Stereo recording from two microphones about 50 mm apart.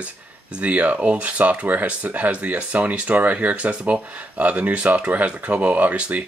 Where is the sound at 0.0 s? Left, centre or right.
Right.